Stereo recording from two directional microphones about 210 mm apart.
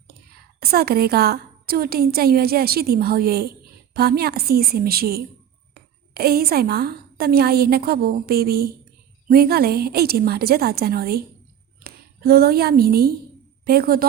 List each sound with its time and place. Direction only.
0.6 s a woman's voice: 45° right (ahead or behind)